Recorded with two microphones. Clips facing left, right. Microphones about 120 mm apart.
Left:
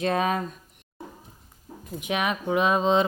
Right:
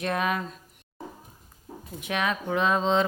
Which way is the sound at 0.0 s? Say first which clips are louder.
Left 3 dB; 30° left (ahead or behind).